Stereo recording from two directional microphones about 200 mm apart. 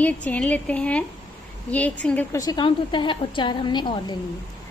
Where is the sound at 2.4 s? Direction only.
25° left (ahead or behind).